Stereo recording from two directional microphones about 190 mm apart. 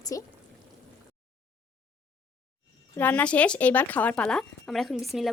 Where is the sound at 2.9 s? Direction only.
10° left (ahead or behind).